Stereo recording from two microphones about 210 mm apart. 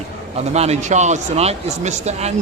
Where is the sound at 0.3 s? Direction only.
30° right (ahead or behind).